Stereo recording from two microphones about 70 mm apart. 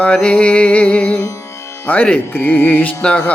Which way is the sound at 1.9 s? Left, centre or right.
Left.